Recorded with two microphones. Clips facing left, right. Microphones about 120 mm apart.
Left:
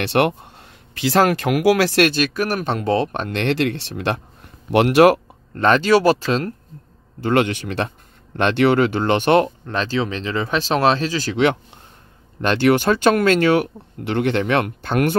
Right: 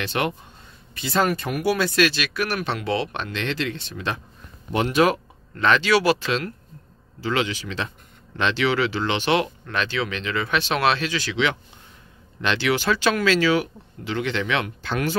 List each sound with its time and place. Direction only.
0.0 s speech: 65° left (ahead or behind)
0.9 s speech: 90° left
2.0 s speech: 45° left (ahead or behind)
3.3 s speech: 60° left (ahead or behind)
5.5 s speech: 45° left (ahead or behind)
7.2 s speech: 55° left (ahead or behind)
9.7 s speech: 35° left (ahead or behind); by 15.1 s 55° left (ahead or behind)